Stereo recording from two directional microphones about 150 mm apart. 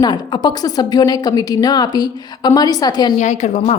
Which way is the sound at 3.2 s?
50° left (ahead or behind).